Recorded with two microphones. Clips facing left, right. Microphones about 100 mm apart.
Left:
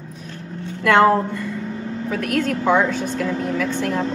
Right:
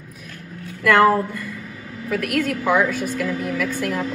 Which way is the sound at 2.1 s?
30° left (ahead or behind).